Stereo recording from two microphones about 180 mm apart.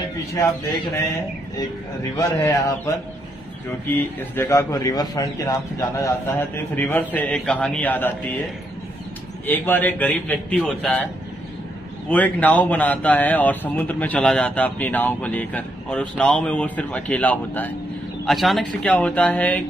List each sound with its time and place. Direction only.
2.1 s a man's voice: 20° left (ahead or behind)
3.8 s a man's voice: 10° left (ahead or behind)
9.5 s a man's voice: 10° left (ahead or behind)
12.1 s a man's voice: 10° left (ahead or behind)